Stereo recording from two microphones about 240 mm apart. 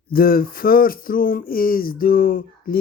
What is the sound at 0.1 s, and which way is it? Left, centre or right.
Speech, left.